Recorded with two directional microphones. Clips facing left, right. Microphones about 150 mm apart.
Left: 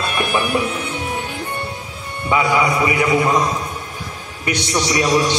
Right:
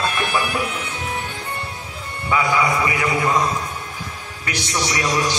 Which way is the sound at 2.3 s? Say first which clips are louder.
Left 2 dB; 20° left (ahead or behind).